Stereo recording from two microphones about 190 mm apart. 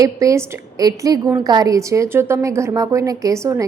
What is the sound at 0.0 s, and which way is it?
A woman's voice, 15° right (ahead or behind).